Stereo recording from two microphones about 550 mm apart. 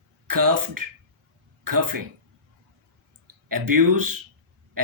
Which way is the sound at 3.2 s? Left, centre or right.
Right.